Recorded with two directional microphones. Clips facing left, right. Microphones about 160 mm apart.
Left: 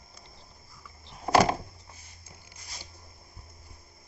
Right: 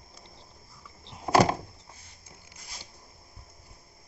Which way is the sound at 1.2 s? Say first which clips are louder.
Even; 15° right (ahead or behind).